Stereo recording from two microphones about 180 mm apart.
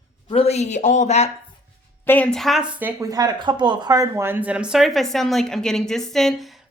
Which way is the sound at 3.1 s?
20° right (ahead or behind).